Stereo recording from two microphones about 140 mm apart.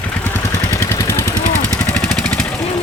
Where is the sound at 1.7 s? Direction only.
10° left (ahead or behind).